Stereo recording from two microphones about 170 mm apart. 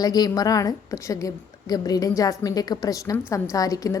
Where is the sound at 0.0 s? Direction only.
20° left (ahead or behind).